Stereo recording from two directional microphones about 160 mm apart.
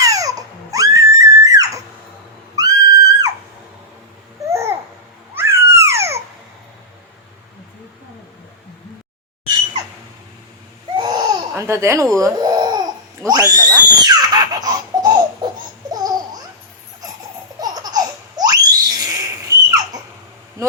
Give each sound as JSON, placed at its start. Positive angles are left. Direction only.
{"t": 0.0, "sound": "crying", "side_deg": -20}
{"t": 2.6, "sound": "a sound", "side_deg": -20}
{"t": 4.4, "sound": "babbling", "side_deg": -15}
{"t": 5.3, "sound": "a sound", "side_deg": -15}
{"t": 10.9, "sound": "laughter", "side_deg": -25}
{"t": 12.1, "sound": "babbling", "side_deg": -20}
{"t": 17.6, "sound": "laughter", "side_deg": -25}